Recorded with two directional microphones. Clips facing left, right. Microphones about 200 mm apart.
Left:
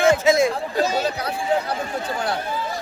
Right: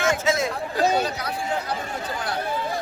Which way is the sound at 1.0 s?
30° left (ahead or behind).